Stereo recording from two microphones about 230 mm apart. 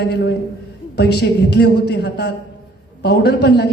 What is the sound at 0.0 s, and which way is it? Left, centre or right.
A woman's voice, left.